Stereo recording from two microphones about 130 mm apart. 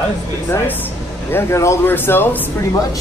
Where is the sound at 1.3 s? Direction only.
20° left (ahead or behind).